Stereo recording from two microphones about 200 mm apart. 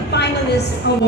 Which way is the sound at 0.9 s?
55° left (ahead or behind).